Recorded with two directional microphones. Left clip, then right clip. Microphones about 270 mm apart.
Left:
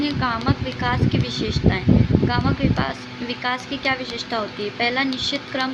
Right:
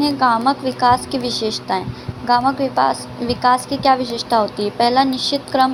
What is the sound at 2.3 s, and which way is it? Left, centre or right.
A woman's voice, centre.